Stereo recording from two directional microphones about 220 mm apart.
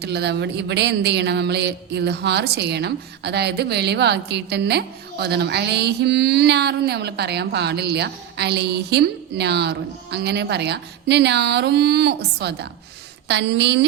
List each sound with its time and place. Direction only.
0.0 s speech: 50° right (ahead or behind)